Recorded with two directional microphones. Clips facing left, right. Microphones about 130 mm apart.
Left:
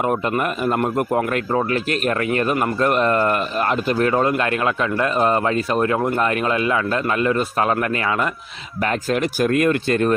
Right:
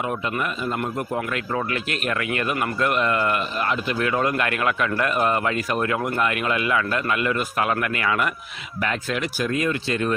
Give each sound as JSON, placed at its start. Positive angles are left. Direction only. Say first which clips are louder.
{"t": 0.0, "sound": "a man's voice", "louder": "left 6 dB", "side_deg": 45}
{"t": 1.5, "sound": "a man's voice", "louder": "left 6 dB", "side_deg": 35}
{"t": 8.8, "sound": "a man's voice", "louder": "left 5 dB", "side_deg": 40}